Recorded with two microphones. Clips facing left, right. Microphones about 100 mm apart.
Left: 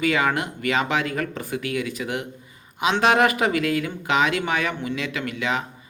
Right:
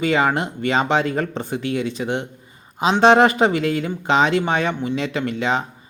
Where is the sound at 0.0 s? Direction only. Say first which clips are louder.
Right 3 dB; 30° right (ahead or behind).